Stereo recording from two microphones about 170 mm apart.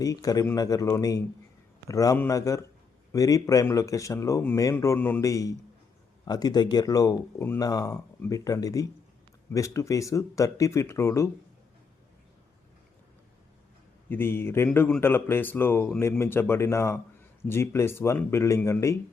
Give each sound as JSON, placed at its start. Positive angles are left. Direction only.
{"t": 0.0, "sound": "speech", "side_deg": 20}
{"t": 14.1, "sound": "speech", "side_deg": 15}